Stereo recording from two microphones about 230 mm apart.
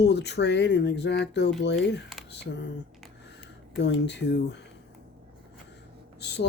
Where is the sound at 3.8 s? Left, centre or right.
Left.